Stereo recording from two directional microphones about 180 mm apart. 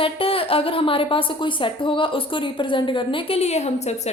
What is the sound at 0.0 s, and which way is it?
Speech, 30° left (ahead or behind).